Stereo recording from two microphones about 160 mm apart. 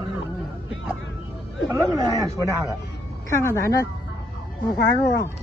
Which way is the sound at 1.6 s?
20° right (ahead or behind).